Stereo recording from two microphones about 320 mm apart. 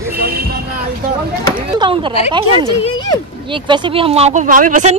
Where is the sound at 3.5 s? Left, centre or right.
Centre.